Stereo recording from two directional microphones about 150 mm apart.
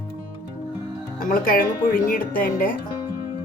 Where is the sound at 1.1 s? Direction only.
65° left (ahead or behind).